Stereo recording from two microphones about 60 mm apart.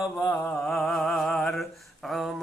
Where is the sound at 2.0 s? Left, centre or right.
Centre.